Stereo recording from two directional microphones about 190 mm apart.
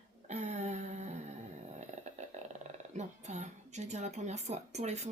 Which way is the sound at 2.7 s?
40° right (ahead or behind).